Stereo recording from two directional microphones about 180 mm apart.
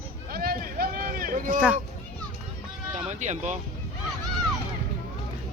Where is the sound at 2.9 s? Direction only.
40° right (ahead or behind).